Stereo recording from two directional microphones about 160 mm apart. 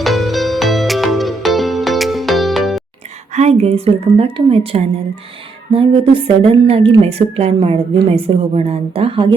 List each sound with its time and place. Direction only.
0.0 s music: centre (ahead or behind)
3.3 s a woman's voice: 40° right (ahead or behind)